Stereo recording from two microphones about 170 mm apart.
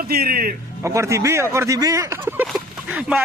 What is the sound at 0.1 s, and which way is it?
Speech, 60° right (ahead or behind).